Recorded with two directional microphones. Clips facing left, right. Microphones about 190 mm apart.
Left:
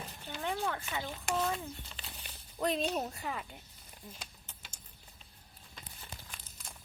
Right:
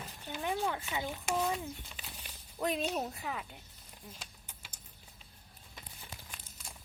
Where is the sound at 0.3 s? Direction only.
10° right (ahead or behind).